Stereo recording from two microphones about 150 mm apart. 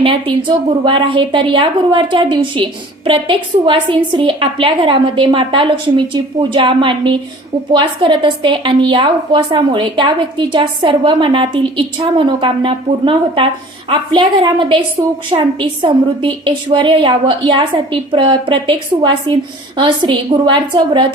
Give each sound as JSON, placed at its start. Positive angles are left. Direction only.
{"t": 0.0, "sound": "a woman's voice", "side_deg": -35}